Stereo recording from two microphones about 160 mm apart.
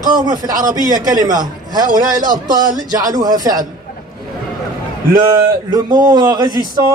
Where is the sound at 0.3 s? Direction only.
25° right (ahead or behind).